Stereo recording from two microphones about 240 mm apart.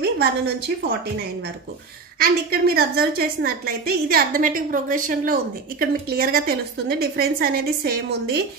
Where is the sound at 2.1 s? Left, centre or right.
Right.